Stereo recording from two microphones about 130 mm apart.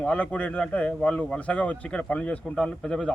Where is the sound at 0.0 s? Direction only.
10° left (ahead or behind).